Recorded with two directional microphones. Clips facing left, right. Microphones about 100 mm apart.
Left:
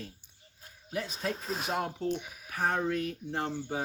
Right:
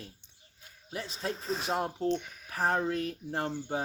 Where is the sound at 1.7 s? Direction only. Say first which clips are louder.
Even; 30° right (ahead or behind).